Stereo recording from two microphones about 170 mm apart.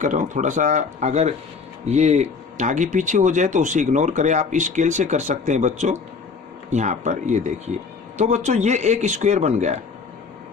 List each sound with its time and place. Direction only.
0.0 s speech: 50° right (ahead or behind)